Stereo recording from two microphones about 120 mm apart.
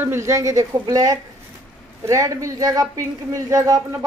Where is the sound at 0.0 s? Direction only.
20° right (ahead or behind).